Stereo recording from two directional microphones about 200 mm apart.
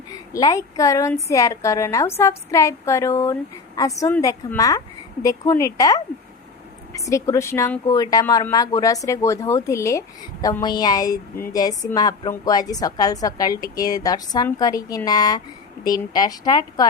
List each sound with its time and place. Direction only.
0.1 s a woman's voice: 20° left (ahead or behind)